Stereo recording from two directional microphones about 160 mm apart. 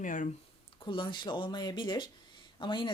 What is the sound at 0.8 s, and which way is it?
Speech, 30° left (ahead or behind).